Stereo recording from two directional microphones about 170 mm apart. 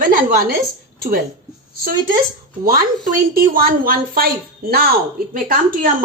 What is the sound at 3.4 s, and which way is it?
Speech, 60° right (ahead or behind).